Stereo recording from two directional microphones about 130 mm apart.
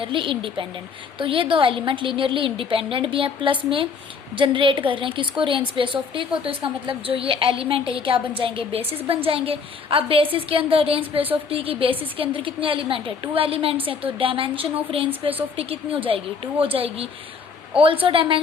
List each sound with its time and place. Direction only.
0.0 s a woman's voice: 40° right (ahead or behind)